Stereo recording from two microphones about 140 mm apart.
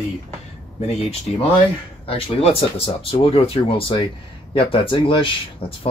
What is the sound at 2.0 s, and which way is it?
Speech, 45° left (ahead or behind).